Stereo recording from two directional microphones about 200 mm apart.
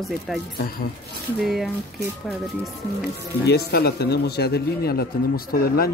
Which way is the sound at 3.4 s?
55° left (ahead or behind).